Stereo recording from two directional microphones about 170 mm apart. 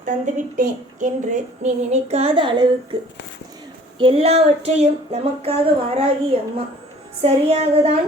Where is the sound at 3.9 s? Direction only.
35° right (ahead or behind).